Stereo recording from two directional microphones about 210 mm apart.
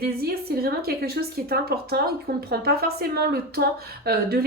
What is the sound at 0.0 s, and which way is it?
A woman's voice, 45° right (ahead or behind).